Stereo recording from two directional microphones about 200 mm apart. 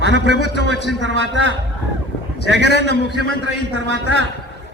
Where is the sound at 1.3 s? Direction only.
65° right (ahead or behind).